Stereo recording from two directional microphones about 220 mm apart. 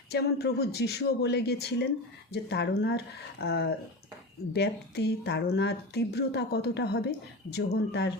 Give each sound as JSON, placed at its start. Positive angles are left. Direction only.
{"t": 0.1, "sound": "speech", "side_deg": 45}